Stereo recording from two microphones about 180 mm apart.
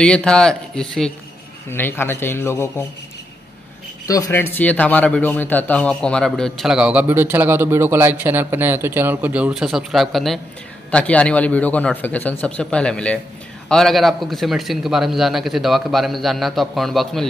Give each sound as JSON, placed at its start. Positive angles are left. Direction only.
{"t": 0.0, "sound": "speech", "side_deg": 5}
{"t": 4.1, "sound": "speech", "side_deg": 15}